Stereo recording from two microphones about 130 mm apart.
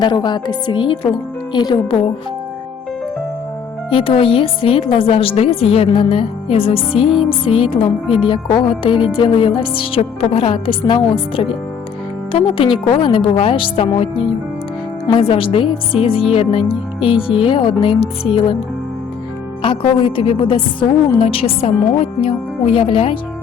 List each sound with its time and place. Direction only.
0.0 s speech: 35° left (ahead or behind)
3.8 s a woman's voice: 45° left (ahead or behind)
19.6 s a woman's voice: 40° left (ahead or behind)